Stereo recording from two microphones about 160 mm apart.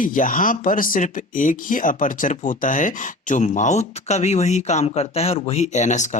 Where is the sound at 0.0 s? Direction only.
55° left (ahead or behind).